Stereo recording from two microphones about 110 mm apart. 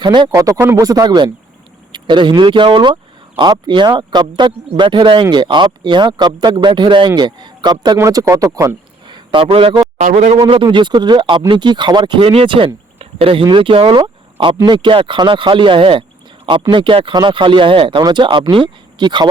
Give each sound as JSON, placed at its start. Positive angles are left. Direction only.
{"t": 0.0, "sound": "speech", "side_deg": -45}
{"t": 0.3, "sound": "speech", "side_deg": -30}
{"t": 7.9, "sound": "speech", "side_deg": -30}
{"t": 9.0, "sound": "a sound", "side_deg": -45}
{"t": 10.0, "sound": "a man's voice", "side_deg": -90}
{"t": 10.5, "sound": "speech", "side_deg": -50}